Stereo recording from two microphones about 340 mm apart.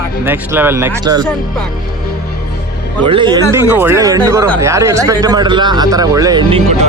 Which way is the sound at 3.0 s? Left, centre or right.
Centre.